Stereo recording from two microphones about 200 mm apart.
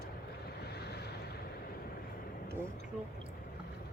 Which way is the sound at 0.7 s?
55° left (ahead or behind).